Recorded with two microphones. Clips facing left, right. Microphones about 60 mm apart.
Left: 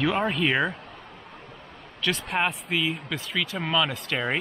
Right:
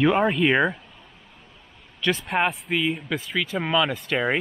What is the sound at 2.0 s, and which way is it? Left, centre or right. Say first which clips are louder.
Speech: right 3 dB; centre.